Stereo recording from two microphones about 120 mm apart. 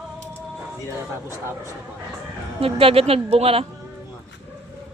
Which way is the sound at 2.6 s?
50° right (ahead or behind).